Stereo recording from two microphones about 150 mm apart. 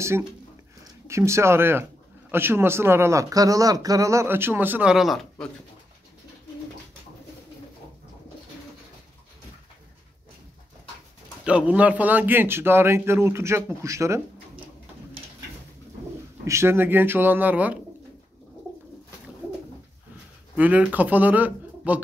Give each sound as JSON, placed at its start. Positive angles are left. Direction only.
{"t": 1.0, "sound": "speech", "side_deg": -20}
{"t": 11.4, "sound": "speech", "side_deg": -10}
{"t": 16.4, "sound": "speech", "side_deg": -15}
{"t": 20.5, "sound": "speech", "side_deg": -10}